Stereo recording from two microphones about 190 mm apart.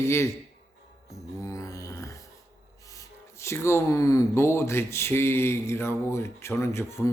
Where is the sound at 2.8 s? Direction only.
15° left (ahead or behind).